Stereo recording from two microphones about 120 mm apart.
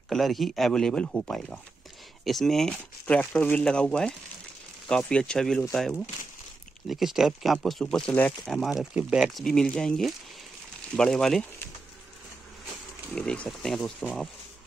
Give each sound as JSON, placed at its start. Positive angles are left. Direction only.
{"t": 0.1, "sound": "speech", "side_deg": 0}
{"t": 9.4, "sound": "speech", "side_deg": 5}
{"t": 13.1, "sound": "speech", "side_deg": 5}